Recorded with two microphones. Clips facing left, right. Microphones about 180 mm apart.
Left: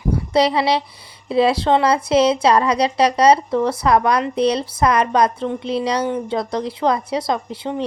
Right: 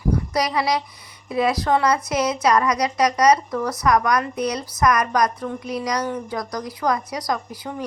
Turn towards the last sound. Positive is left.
turn(degrees=25)  # may be behind; listen again after turning